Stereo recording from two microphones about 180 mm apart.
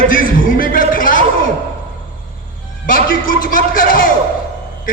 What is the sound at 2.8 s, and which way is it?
A man's voice, 50° left (ahead or behind).